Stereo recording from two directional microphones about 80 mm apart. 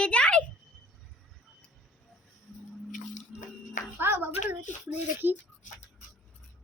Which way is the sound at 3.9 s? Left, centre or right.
Right.